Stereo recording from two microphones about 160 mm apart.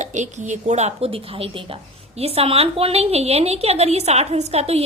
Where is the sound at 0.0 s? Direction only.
50° right (ahead or behind).